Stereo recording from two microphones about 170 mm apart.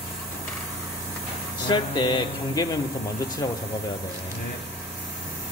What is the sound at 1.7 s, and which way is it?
Speech, 25° left (ahead or behind).